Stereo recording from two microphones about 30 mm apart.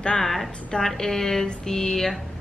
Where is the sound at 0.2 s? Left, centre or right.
Centre.